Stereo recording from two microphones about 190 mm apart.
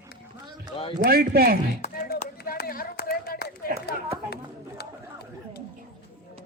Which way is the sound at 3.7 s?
50° right (ahead or behind).